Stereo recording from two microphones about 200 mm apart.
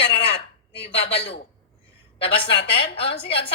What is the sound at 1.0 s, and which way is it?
A woman's voice, 30° left (ahead or behind).